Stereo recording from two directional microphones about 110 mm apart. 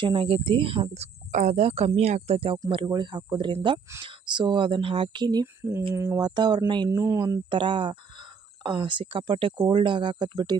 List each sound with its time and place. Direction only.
0.0 s speech: 50° right (ahead or behind)
2.6 s speech: 45° right (ahead or behind)
5.9 s speech: 25° right (ahead or behind)
6.1 s speech: 40° right (ahead or behind)
7.0 s speech: 30° right (ahead or behind)
7.5 s speech: 50° right (ahead or behind)